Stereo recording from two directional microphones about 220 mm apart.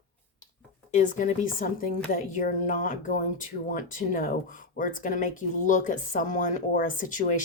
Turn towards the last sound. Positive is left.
turn(degrees=35)  # may be behind; listen again after turning